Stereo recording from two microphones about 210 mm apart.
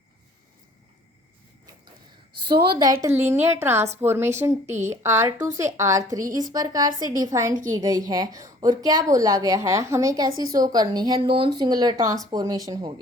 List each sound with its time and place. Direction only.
3.2 s a woman's voice: 10° right (ahead or behind)